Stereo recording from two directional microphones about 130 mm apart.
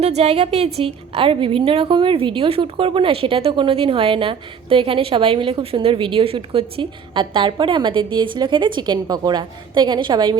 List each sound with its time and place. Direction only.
0.0 s a woman's voice: 55° right (ahead or behind); by 10.3 s 35° right (ahead or behind)